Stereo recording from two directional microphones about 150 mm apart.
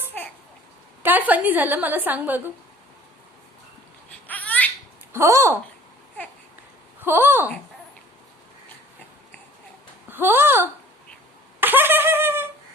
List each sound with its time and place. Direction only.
1.0 s a woman's voice: 10° right (ahead or behind)
4.3 s baby laughter: 10° left (ahead or behind)
5.1 s speech: 20° right (ahead or behind)
7.0 s speech: 15° right (ahead or behind)
10.1 s speech: 15° right (ahead or behind)
11.6 s a sound: 15° right (ahead or behind)